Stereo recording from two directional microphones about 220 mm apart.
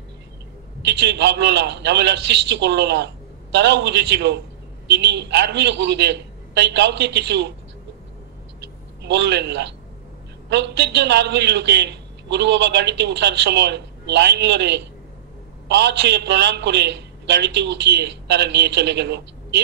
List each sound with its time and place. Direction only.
0.8 s a man's voice: 50° right (ahead or behind)
9.0 s a man's voice: 50° right (ahead or behind)